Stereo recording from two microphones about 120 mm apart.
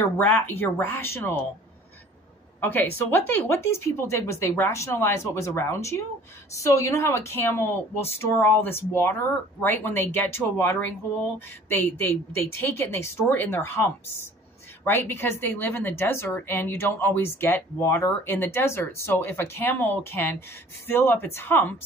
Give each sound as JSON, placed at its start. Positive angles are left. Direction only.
{"t": 0.0, "sound": "speech", "side_deg": 20}
{"t": 2.6, "sound": "speech", "side_deg": 15}
{"t": 14.9, "sound": "speech", "side_deg": 20}